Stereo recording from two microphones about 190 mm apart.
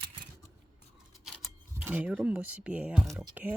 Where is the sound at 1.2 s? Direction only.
5° right (ahead or behind).